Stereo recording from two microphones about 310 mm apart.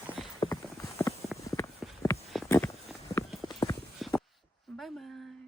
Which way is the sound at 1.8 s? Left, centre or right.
Centre.